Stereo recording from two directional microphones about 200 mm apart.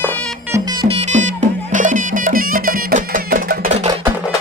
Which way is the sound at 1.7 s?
40° right (ahead or behind).